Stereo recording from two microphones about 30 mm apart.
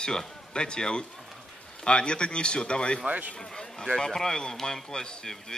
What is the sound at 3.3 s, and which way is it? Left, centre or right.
Speech, left.